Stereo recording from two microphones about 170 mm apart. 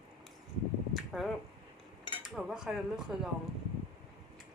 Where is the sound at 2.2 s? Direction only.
5° right (ahead or behind).